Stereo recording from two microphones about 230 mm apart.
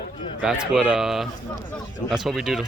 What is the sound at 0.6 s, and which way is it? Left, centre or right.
Speech, centre.